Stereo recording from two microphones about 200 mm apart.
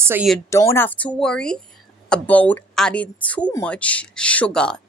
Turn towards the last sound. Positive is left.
turn(degrees=5)  # may be behind; listen again after turning